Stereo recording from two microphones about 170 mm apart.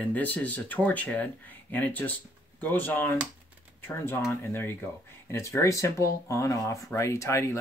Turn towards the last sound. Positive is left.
turn(degrees=15)  # may be behind; listen again after turning